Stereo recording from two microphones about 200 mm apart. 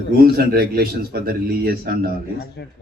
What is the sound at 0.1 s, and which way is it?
Speech, 50° right (ahead or behind).